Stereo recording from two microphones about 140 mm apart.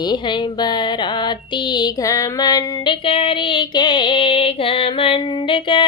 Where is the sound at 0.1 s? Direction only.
30° left (ahead or behind).